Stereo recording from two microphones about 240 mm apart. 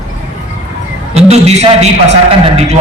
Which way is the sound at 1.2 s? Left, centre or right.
Right.